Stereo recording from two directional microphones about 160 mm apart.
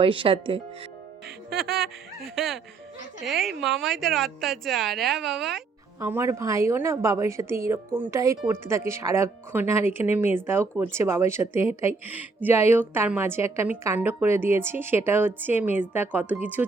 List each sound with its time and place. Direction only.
0.0 s speech: 35° right (ahead or behind)
2.2 s a woman's voice: centre (ahead or behind)
6.0 s a woman's voice: 15° right (ahead or behind)